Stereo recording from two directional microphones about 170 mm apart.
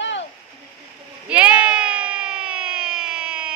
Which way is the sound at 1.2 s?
5° right (ahead or behind).